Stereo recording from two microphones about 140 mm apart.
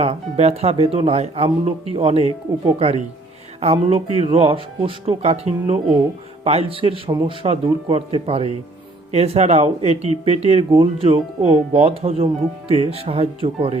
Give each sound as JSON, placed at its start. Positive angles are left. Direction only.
{"t": 0.0, "sound": "speech", "side_deg": -45}
{"t": 7.1, "sound": "speech", "side_deg": -30}
{"t": 7.4, "sound": "speech", "side_deg": -45}